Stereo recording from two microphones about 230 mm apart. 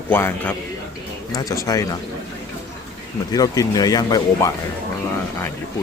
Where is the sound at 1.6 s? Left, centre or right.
Centre.